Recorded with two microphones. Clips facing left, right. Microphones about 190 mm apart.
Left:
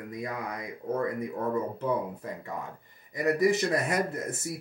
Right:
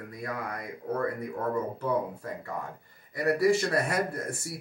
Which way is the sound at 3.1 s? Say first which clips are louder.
Right 1 dB; 20° left (ahead or behind).